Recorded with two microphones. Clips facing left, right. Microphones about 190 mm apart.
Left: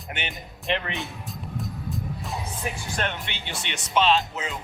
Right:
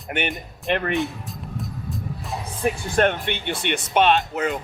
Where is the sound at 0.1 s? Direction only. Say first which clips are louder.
Right 9 dB; 55° right (ahead or behind).